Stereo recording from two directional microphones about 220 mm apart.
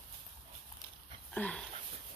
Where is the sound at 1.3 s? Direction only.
5° left (ahead or behind).